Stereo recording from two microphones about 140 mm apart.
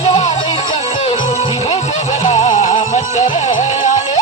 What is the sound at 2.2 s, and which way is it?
Music, 50° left (ahead or behind).